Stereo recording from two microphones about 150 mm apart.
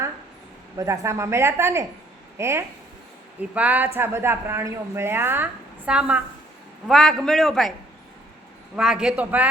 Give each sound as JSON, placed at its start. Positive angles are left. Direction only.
{"t": 0.8, "sound": "speech", "side_deg": -20}
{"t": 6.8, "sound": "a man's voice", "side_deg": 0}
{"t": 8.7, "sound": "speech", "side_deg": -5}